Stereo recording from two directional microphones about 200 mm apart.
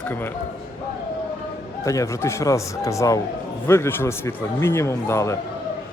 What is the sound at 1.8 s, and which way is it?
Speech, 15° left (ahead or behind).